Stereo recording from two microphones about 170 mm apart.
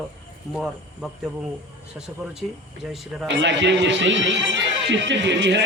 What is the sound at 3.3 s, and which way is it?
A man's voice, 90° right.